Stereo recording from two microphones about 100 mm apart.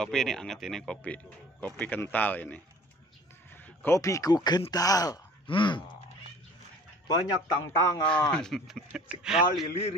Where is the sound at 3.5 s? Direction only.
20° left (ahead or behind).